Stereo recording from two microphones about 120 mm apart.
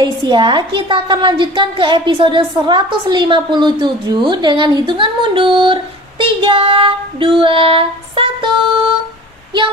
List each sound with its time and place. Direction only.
0.0 s a woman's voice: 40° right (ahead or behind)